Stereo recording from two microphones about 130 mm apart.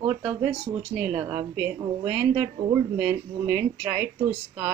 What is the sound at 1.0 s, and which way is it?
Speech, 10° right (ahead or behind).